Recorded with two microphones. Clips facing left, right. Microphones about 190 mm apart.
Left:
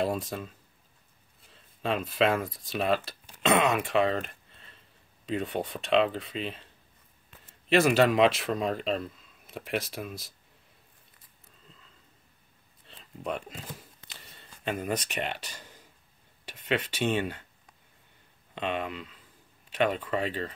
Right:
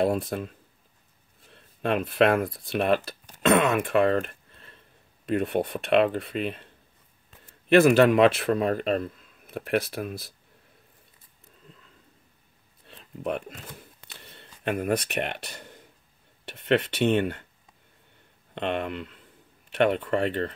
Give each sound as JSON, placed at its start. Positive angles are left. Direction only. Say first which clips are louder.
{"t": 0.0, "sound": "speech", "louder": "right 5 dB", "side_deg": -60}
{"t": 1.5, "sound": "speech", "louder": "right 4 dB", "side_deg": -60}
{"t": 7.7, "sound": "speech", "louder": "right 5 dB", "side_deg": -55}
{"t": 12.8, "sound": "a sound", "louder": "right 4 dB", "side_deg": -55}
{"t": 16.4, "sound": "speech", "louder": "right 6 dB", "side_deg": -60}
{"t": 18.5, "sound": "speech", "louder": "right 3 dB", "side_deg": -60}